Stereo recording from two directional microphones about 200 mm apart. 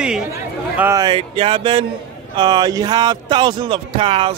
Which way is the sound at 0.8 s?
15° right (ahead or behind).